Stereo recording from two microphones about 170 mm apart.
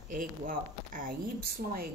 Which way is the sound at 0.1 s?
55° right (ahead or behind).